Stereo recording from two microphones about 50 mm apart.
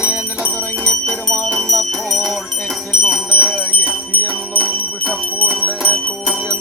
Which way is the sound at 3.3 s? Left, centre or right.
Centre.